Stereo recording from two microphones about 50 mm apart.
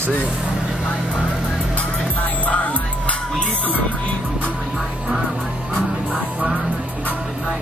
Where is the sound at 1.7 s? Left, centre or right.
Left.